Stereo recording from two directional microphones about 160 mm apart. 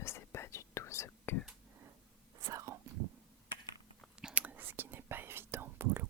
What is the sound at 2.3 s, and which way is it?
Whispering, 20° right (ahead or behind).